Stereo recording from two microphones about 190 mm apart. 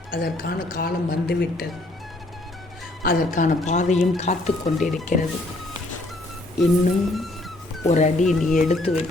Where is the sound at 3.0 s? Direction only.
45° left (ahead or behind).